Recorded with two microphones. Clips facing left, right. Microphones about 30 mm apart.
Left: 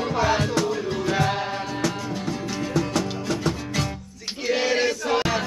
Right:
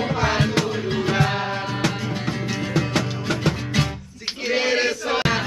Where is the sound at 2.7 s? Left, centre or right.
Right.